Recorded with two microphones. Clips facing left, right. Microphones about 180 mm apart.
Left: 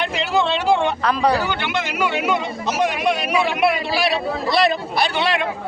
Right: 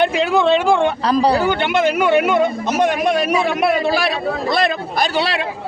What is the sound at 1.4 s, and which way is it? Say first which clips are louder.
A man's voice: right 7 dB; 50° right (ahead or behind).